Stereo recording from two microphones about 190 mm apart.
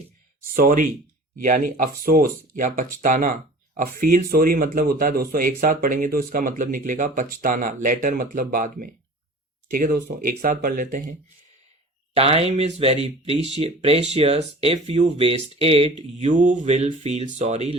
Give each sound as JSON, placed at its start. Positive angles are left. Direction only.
{"t": 0.5, "sound": "speech", "side_deg": -50}
{"t": 12.1, "sound": "speech", "side_deg": -30}